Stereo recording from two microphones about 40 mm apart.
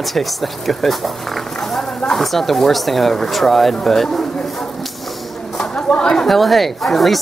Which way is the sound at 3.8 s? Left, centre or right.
Centre.